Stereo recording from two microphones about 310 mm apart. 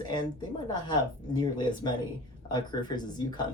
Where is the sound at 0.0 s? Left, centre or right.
Centre.